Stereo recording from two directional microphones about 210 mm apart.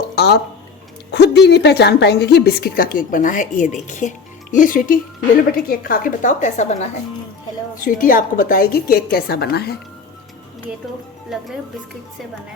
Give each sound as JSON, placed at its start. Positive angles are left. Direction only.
{"t": 0.2, "sound": "a woman's voice", "side_deg": 50}